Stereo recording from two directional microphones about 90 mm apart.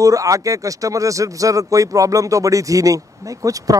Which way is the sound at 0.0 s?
40° right (ahead or behind).